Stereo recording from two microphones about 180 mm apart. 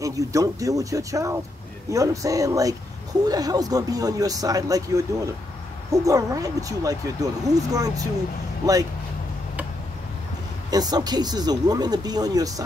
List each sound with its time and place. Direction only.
0.0 s speech: 20° right (ahead or behind)
10.7 s speech: 20° right (ahead or behind)